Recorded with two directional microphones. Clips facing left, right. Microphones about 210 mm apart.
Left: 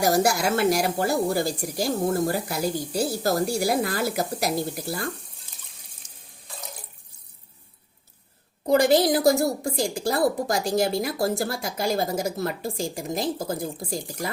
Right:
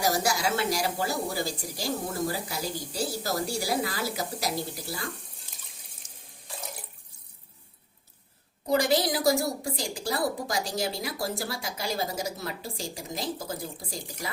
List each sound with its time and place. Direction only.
0.0 s speech: 55° left (ahead or behind)
8.6 s a woman's voice: 55° left (ahead or behind)